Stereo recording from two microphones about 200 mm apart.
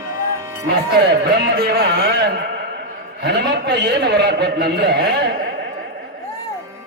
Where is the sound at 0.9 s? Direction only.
55° right (ahead or behind).